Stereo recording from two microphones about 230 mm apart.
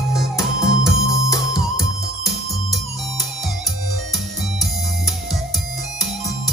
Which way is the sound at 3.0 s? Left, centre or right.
Centre.